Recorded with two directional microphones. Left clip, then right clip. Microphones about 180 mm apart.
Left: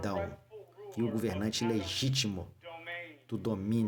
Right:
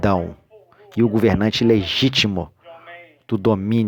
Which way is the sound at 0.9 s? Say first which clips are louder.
Right 17 dB; 45° right (ahead or behind).